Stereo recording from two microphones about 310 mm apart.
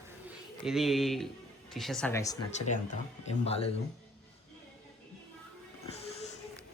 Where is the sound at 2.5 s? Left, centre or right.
Left.